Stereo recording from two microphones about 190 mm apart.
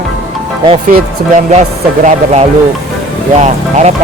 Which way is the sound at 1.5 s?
40° right (ahead or behind).